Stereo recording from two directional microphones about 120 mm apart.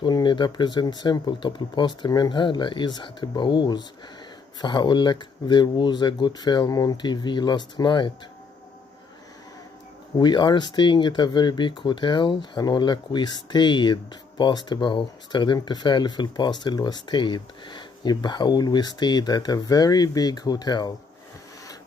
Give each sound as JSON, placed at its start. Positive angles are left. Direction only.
{"t": 0.0, "sound": "speech", "side_deg": 40}
{"t": 10.1, "sound": "speech", "side_deg": 35}